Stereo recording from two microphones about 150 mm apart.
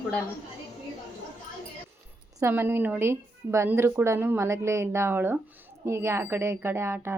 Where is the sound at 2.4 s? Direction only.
15° right (ahead or behind).